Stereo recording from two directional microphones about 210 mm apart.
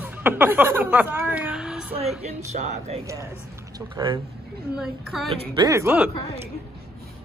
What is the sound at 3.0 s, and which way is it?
Speech, 15° right (ahead or behind).